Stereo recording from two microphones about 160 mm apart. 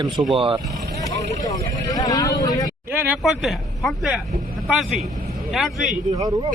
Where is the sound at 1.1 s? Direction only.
20° left (ahead or behind).